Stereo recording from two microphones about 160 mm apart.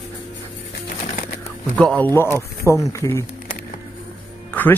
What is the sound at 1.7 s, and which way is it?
Speech, 5° left (ahead or behind).